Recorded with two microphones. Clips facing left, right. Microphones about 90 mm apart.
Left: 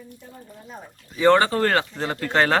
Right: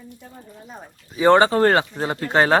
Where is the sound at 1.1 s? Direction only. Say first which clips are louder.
Right 2 dB; 15° right (ahead or behind).